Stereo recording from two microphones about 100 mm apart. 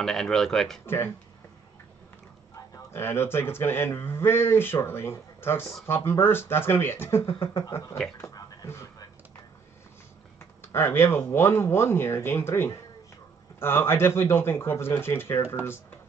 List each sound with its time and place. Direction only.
0.0 s speech: 5° left (ahead or behind)
0.8 s speech: 25° left (ahead or behind)
2.9 s speech: 25° left (ahead or behind)
10.6 s speech: 25° left (ahead or behind)